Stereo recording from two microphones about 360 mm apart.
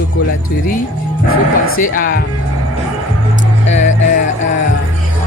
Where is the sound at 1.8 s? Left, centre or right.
Left.